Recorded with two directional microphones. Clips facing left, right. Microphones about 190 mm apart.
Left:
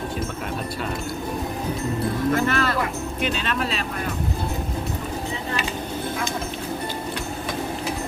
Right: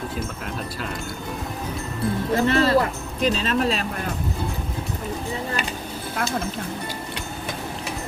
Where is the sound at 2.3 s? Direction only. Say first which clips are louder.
Right 7 dB; 30° right (ahead or behind).